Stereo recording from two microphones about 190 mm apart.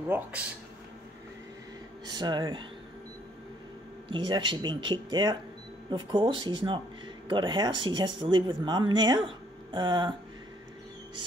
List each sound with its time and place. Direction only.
0.1 s speech: 5° right (ahead or behind)
2.1 s speech: 25° right (ahead or behind)
4.1 s speech: 25° right (ahead or behind)